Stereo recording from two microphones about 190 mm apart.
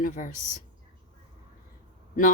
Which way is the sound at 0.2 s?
45° left (ahead or behind).